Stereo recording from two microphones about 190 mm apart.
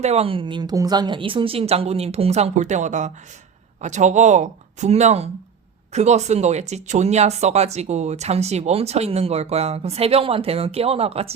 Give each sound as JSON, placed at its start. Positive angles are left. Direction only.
{"t": 0.0, "sound": "speech", "side_deg": -35}